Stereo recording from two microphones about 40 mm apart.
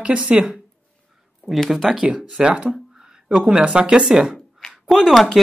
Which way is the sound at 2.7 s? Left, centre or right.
Centre.